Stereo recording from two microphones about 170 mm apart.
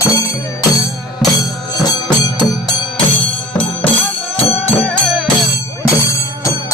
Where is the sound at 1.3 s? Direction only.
25° left (ahead or behind).